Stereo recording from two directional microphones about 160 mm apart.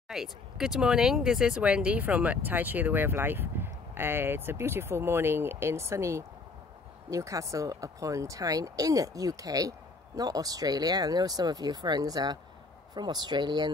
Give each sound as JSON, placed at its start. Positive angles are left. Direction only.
{"t": 0.1, "sound": "speech", "side_deg": -5}